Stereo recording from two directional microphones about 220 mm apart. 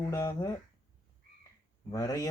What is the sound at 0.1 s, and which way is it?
Speech, 15° left (ahead or behind).